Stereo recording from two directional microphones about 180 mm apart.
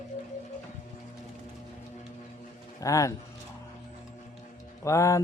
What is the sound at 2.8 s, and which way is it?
Speech, 15° left (ahead or behind).